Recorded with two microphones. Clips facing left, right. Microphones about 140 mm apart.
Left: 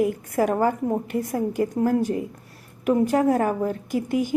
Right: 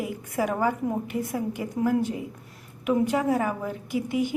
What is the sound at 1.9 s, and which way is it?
A woman's voice, 40° left (ahead or behind).